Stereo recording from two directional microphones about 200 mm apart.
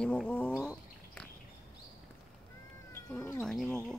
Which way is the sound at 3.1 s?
10° left (ahead or behind).